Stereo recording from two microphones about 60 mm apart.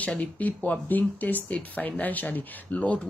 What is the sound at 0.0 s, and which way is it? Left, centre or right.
Speech, left.